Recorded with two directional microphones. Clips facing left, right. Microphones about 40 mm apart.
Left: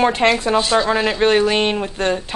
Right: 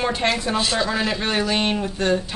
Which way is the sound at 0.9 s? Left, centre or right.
Left.